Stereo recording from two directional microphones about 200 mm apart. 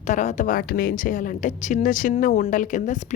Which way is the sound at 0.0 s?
40° left (ahead or behind).